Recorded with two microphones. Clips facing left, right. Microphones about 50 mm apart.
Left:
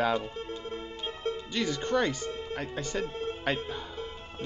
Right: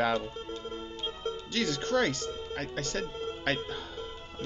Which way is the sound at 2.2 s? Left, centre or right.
Left.